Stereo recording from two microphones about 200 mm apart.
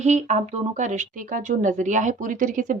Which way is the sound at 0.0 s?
35° right (ahead or behind).